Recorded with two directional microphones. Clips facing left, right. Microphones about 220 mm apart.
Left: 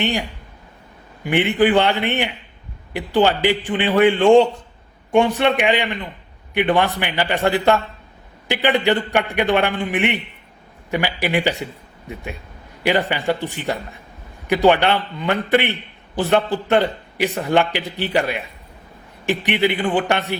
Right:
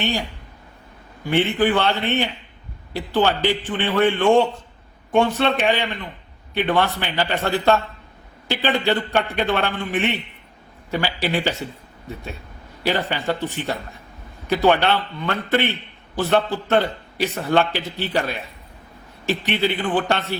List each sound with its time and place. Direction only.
0.0 s a man's voice: 15° left (ahead or behind)